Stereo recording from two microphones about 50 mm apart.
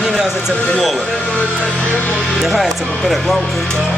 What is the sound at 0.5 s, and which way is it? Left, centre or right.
Music, left.